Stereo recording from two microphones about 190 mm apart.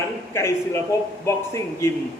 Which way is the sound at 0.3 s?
15° left (ahead or behind).